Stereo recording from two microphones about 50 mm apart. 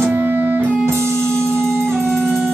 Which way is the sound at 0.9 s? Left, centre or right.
Right.